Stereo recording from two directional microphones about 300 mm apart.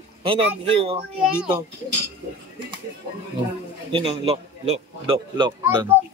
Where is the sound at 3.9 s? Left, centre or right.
Centre.